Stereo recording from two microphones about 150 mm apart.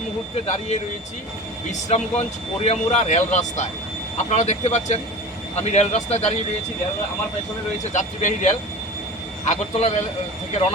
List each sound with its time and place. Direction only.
0.4 s speech: 50° left (ahead or behind)
1.9 s speech: 45° left (ahead or behind)
7.9 s speech: 55° left (ahead or behind)